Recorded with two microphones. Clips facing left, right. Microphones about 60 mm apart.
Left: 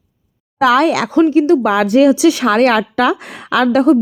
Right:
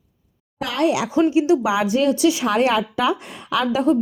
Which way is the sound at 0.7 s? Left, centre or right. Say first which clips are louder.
Left 6 dB; left.